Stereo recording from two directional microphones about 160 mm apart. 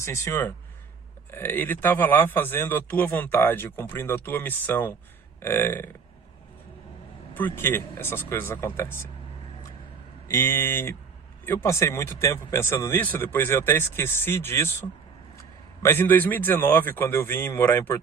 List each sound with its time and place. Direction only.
0.0 s a man's voice: 20° left (ahead or behind)
7.3 s a man's voice: 15° left (ahead or behind)
10.2 s a man's voice: 20° left (ahead or behind)